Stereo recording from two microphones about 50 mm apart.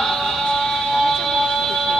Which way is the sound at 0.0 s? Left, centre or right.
Centre.